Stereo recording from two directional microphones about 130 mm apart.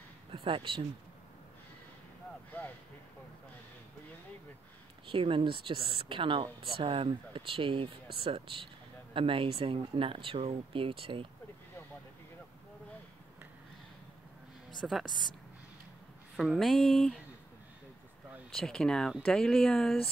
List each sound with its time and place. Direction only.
0.3 s speech: 40° right (ahead or behind)
5.0 s speech: 40° right (ahead or behind)
14.9 s speech: centre (ahead or behind)
16.3 s speech: centre (ahead or behind)
18.5 s speech: 5° left (ahead or behind)